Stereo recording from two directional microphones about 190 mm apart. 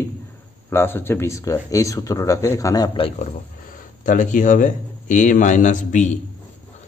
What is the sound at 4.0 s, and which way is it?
A man's voice, 40° left (ahead or behind).